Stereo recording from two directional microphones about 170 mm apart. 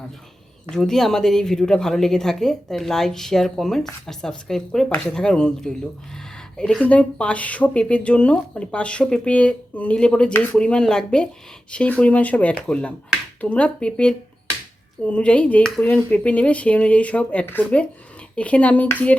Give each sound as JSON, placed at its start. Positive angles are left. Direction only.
{"t": 0.7, "sound": "speech", "side_deg": 5}